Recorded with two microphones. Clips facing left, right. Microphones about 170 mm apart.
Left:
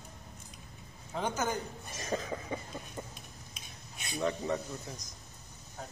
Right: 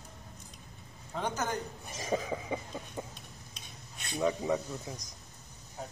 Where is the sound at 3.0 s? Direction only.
15° right (ahead or behind).